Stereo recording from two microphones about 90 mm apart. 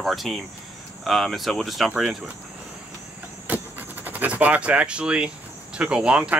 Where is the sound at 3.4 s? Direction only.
20° right (ahead or behind).